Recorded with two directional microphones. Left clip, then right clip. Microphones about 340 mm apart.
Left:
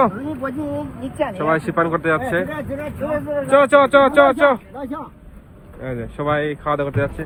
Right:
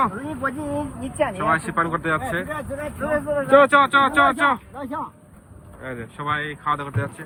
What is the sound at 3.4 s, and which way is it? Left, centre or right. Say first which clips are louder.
Speech: left 2 dB; centre.